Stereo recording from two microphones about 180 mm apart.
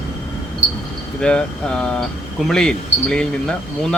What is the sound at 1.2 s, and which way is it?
Speech, 5° left (ahead or behind).